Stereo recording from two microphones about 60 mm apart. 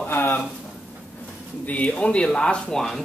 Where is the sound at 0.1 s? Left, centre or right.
Left.